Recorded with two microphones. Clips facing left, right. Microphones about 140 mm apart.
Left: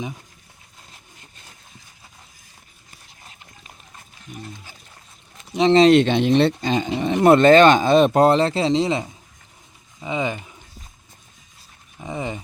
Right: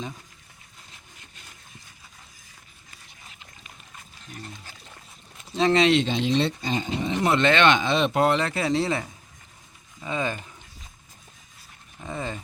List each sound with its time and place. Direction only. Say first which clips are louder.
5.5 s speech: left 4 dB; 20° left (ahead or behind)
5.9 s speech: left 7 dB; 60° left (ahead or behind); by 10.5 s 15° left (ahead or behind)
11.9 s speech: left 4 dB; 15° left (ahead or behind)